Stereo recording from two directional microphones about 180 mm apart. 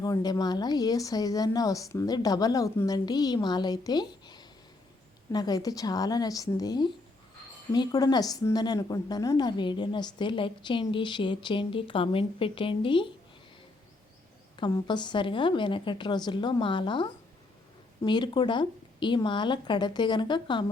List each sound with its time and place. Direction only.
0.0 s a woman's voice: 20° left (ahead or behind)
14.5 s a woman's voice: 25° left (ahead or behind)